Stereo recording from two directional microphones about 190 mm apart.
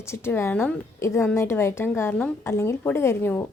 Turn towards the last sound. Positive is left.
turn(degrees=10)  # may be behind; listen again after turning